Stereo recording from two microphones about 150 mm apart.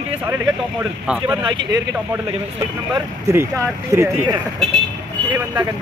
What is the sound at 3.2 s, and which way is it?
Speech, 20° right (ahead or behind).